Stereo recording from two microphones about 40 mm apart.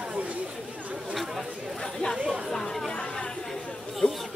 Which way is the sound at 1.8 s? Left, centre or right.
Centre.